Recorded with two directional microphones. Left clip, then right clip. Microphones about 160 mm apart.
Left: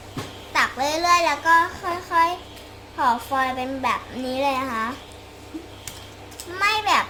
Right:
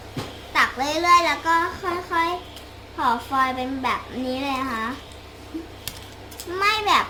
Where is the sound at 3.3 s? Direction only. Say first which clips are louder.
Right 1 dB; 50° left (ahead or behind).